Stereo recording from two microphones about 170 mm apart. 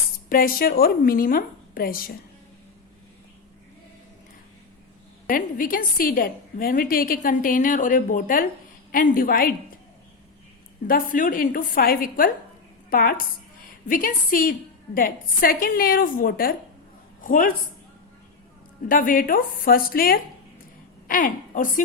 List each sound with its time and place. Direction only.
0.3 s a woman's voice: 55° left (ahead or behind)
5.3 s a woman's voice: 55° left (ahead or behind)
10.8 s a woman's voice: 55° left (ahead or behind)
18.9 s a woman's voice: 55° left (ahead or behind)